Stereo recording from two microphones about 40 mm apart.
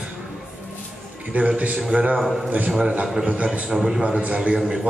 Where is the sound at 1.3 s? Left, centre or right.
Right.